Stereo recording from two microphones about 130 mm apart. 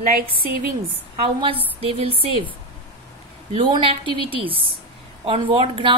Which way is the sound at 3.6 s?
40° right (ahead or behind).